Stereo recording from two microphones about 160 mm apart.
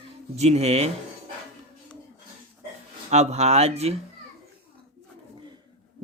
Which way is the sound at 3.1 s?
45° right (ahead or behind).